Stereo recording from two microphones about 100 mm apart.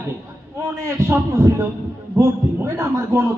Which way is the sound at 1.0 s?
30° right (ahead or behind).